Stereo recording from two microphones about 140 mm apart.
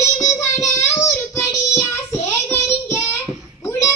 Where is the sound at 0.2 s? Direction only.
25° left (ahead or behind).